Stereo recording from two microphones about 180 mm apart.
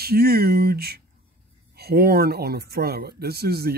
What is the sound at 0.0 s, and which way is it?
Speech, 60° right (ahead or behind).